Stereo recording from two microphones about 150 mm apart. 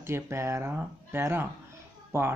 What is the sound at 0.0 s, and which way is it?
Speech, 15° right (ahead or behind).